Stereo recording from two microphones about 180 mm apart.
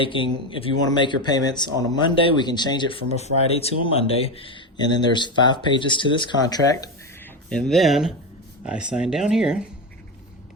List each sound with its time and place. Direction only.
0.0 s speech: 30° left (ahead or behind)
7.5 s speech: centre (ahead or behind)